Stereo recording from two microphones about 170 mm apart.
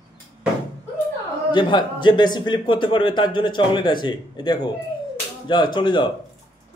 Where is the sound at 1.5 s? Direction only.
30° left (ahead or behind).